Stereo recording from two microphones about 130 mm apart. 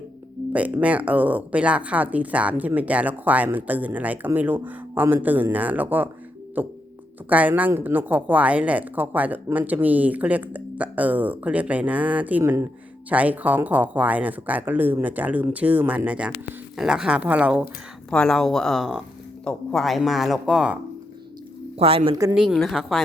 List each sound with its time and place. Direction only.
0.5 s a woman's voice: 10° right (ahead or behind)
18.1 s speech: 5° left (ahead or behind)
21.8 s speech: 50° right (ahead or behind)
22.1 s speech: 30° right (ahead or behind)
22.4 s speech: centre (ahead or behind)